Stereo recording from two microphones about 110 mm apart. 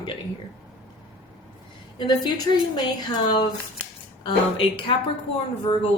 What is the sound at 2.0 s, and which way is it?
A woman's voice, 40° left (ahead or behind).